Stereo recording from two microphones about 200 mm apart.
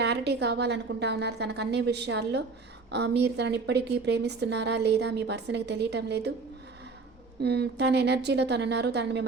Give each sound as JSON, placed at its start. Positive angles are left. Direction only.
{"t": 0.0, "sound": "a woman's voice", "side_deg": -55}
{"t": 7.4, "sound": "a woman's voice", "side_deg": -55}